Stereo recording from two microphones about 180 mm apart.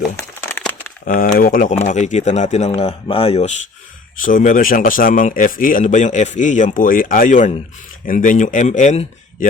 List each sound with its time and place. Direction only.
0.2 s a sound: 10° left (ahead or behind)
1.0 s speech: 50° left (ahead or behind); by 3.5 s 35° left (ahead or behind)
4.2 s speech: 50° left (ahead or behind)